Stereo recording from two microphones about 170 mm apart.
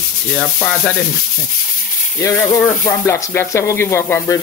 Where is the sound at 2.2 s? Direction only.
20° left (ahead or behind).